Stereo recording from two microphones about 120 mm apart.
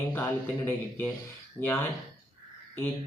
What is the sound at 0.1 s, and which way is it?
Speech, 20° left (ahead or behind).